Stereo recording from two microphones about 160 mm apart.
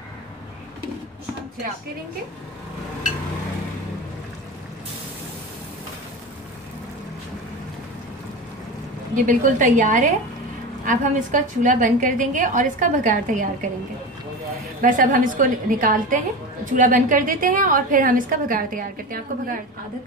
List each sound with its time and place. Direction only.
9.1 s a woman's voice: 55° right (ahead or behind)
14.8 s a woman's voice: 55° right (ahead or behind)